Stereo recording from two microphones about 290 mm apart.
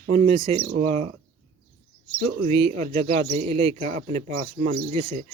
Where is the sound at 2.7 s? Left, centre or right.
Right.